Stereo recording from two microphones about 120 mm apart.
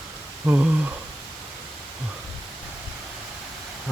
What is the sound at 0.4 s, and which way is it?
Speech, 15° right (ahead or behind).